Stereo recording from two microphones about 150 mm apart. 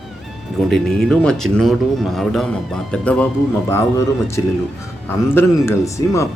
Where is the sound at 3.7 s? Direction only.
20° left (ahead or behind).